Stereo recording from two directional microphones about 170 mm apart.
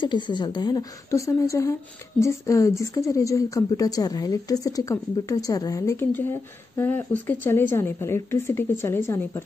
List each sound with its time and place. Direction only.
0.0 s a woman's voice: 25° left (ahead or behind)